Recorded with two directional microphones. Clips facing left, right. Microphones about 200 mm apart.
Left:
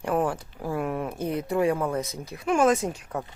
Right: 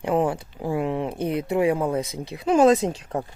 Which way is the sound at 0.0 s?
20° right (ahead or behind).